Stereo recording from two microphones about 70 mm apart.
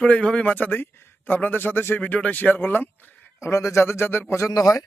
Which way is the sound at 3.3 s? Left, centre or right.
Left.